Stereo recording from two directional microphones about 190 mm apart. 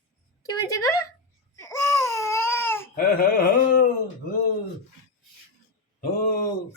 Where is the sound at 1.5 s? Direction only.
15° left (ahead or behind).